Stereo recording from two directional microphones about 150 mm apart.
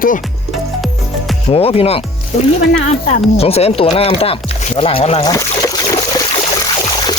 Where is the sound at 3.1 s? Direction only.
40° left (ahead or behind).